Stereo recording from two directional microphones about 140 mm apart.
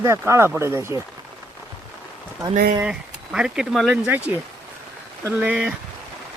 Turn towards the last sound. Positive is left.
turn(degrees=-10)  # may be behind; listen again after turning